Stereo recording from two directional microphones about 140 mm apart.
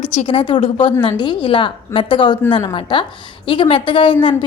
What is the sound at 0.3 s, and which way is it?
A woman's voice, 35° left (ahead or behind).